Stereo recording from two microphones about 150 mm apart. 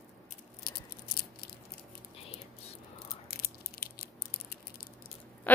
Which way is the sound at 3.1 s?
85° left.